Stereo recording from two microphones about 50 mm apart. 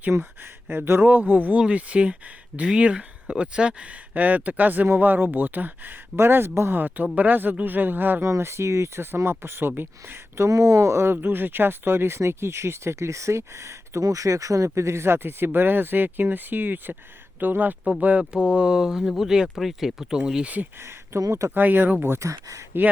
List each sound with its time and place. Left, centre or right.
0.7 s speech: right
1.0 s speech: right
1.5 s speech: right
4.1 s speech: right
6.1 s speech: right
6.7 s speech: right
8.2 s speech: right
9.0 s speech: right
10.4 s speech: right
11.1 s speech: right; by 20.5 s centre
20.8 s speech: right
21.5 s speech: right
22.2 s speech: right